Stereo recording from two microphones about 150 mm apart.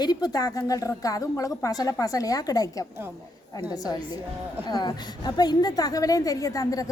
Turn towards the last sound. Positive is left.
turn(degrees=25)  # may be behind; listen again after turning